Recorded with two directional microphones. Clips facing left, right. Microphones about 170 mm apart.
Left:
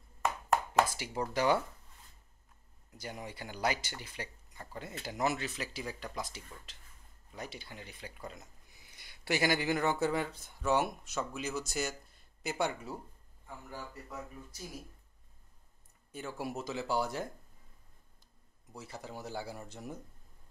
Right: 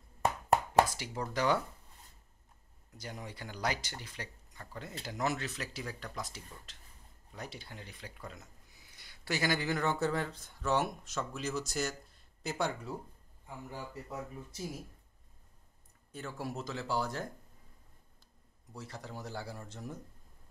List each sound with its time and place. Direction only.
0.9 s speech: 10° left (ahead or behind)
3.0 s speech: 5° left (ahead or behind)
9.3 s speech: 10° left (ahead or behind)
13.7 s speech: 20° right (ahead or behind)
16.1 s speech: 10° left (ahead or behind)
18.8 s speech: 5° left (ahead or behind)